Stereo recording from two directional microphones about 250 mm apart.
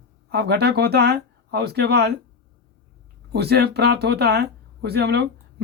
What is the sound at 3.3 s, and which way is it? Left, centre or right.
Speech, right.